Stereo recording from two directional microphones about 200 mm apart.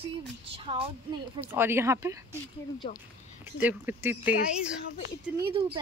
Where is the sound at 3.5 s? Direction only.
10° right (ahead or behind).